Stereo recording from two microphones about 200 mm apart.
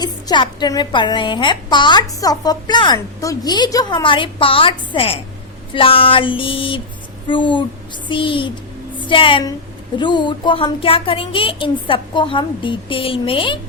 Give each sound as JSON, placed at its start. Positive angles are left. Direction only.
{"t": 0.0, "sound": "a woman's voice", "side_deg": 20}